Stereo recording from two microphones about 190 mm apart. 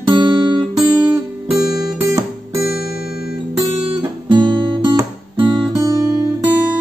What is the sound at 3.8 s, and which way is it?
Guitar, 25° right (ahead or behind).